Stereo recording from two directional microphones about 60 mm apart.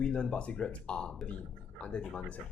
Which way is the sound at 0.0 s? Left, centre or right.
Centre.